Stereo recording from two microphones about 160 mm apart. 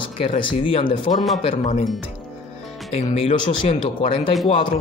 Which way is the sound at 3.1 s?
40° left (ahead or behind).